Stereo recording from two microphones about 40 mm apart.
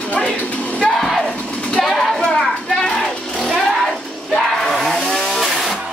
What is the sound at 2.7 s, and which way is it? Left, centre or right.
Music, centre.